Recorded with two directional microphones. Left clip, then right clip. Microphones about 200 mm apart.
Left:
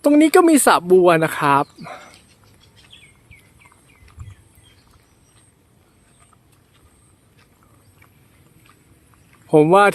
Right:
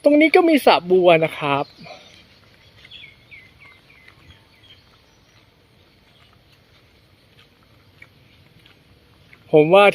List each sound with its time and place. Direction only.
0.0 s speech: 10° left (ahead or behind)
2.8 s a sound: 5° left (ahead or behind)
9.5 s speech: 20° left (ahead or behind)